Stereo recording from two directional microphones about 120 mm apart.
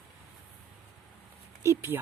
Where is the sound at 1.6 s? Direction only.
20° right (ahead or behind).